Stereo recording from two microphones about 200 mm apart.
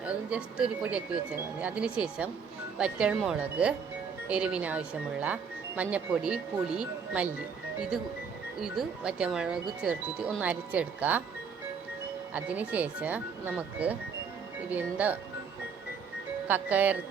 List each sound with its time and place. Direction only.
0.0 s speech: 5° right (ahead or behind)
8.6 s speech: centre (ahead or behind)
12.3 s speech: 5° right (ahead or behind)
16.5 s speech: 10° right (ahead or behind)